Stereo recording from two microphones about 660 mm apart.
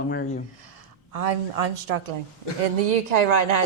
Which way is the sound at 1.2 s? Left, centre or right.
Right.